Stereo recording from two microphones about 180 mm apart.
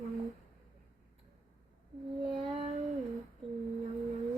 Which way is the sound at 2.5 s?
30° right (ahead or behind).